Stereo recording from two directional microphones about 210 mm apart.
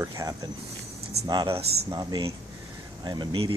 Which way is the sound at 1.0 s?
50° right (ahead or behind).